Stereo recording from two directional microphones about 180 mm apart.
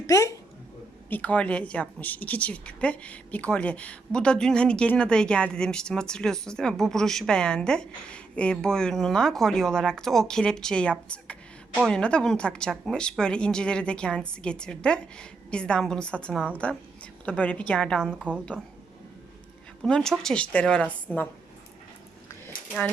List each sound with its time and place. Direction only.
0.1 s a woman's voice: 20° left (ahead or behind)
18.2 s a woman's voice: 5° right (ahead or behind)
19.8 s speech: 5° left (ahead or behind)